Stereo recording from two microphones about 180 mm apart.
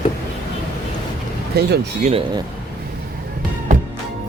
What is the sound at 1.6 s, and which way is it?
Speech, 65° right (ahead or behind).